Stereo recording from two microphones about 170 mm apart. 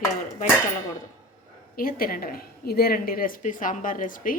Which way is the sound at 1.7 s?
55° left (ahead or behind).